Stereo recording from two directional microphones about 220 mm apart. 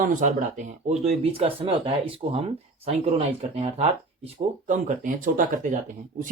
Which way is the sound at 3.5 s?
25° right (ahead or behind).